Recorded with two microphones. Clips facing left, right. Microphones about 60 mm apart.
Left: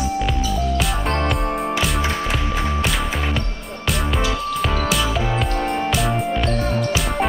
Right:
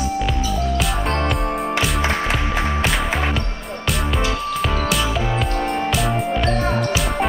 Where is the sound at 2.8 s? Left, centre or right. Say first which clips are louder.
Right 2 dB; centre.